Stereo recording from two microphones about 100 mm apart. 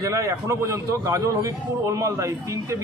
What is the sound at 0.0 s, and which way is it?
Speech, 30° right (ahead or behind).